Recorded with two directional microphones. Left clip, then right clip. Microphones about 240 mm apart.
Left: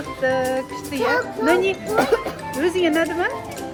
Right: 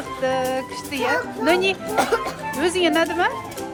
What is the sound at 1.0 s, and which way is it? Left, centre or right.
Speech, right.